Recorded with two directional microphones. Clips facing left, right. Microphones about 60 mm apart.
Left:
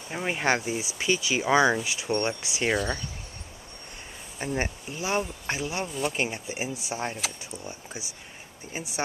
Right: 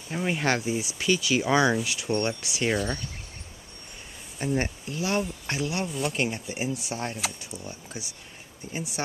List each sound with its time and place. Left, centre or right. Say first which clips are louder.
0.1 s speech: even; centre
4.4 s speech: right 2 dB; centre
7.2 s speech: right 1 dB; centre